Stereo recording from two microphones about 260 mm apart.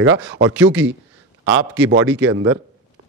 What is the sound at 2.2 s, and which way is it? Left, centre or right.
Speech, right.